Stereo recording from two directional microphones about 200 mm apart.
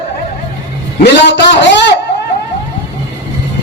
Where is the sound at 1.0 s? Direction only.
60° left (ahead or behind).